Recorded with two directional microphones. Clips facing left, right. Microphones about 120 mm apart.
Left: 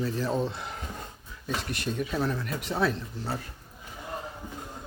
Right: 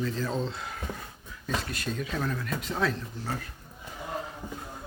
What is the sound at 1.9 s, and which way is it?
Speech, 15° left (ahead or behind).